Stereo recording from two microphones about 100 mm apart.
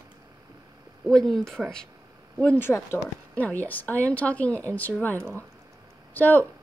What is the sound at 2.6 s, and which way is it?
Speech, 25° left (ahead or behind).